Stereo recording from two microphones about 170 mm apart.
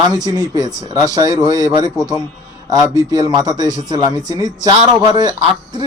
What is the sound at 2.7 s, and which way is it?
Speech, 20° right (ahead or behind).